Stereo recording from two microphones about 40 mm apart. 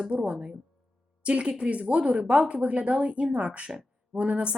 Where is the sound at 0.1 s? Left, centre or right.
Right.